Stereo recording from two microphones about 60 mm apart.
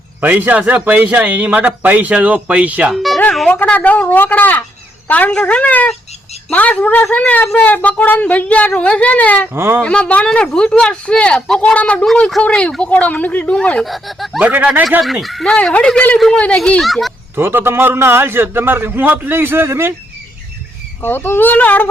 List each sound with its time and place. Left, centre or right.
0.2 s a man's voice: right
2.9 s speech: centre
3.5 s a woman's voice: left
9.5 s a man's voice: right
9.8 s speech: centre
13.8 s speech: centre
14.3 s a man's voice: right
15.0 s speech: centre
17.3 s a man's voice: right
21.0 s a woman's voice: left